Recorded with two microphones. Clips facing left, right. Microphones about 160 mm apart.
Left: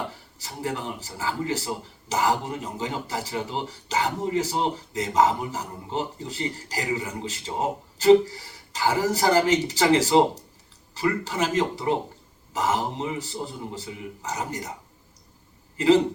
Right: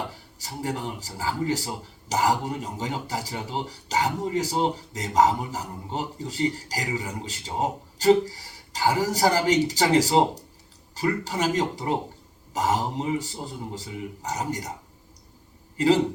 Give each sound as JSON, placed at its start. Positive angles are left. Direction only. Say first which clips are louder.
{"t": 0.3, "sound": "speech", "louder": "even", "side_deg": -40}